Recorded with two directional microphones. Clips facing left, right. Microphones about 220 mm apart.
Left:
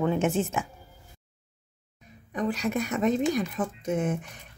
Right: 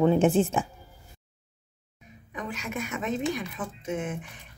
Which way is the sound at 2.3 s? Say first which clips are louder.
Left 7 dB; 35° left (ahead or behind).